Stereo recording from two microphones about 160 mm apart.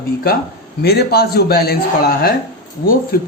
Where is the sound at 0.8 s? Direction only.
85° left.